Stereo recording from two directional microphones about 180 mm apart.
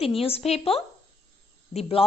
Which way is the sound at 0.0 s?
30° left (ahead or behind).